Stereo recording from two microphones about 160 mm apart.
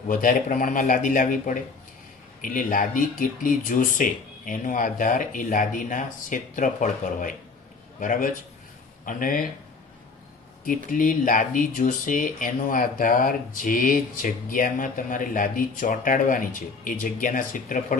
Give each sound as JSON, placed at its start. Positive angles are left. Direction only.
{"t": 0.1, "sound": "speech", "side_deg": 55}
{"t": 10.9, "sound": "speech", "side_deg": 55}